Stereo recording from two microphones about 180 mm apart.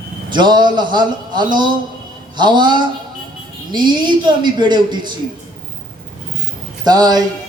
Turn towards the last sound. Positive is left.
turn(degrees=-20)  # may be behind; listen again after turning